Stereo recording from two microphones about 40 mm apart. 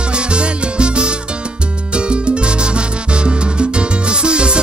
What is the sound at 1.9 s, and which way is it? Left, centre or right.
Salsa music, right.